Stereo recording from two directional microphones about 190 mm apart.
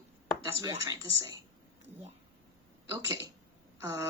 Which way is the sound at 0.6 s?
20° right (ahead or behind).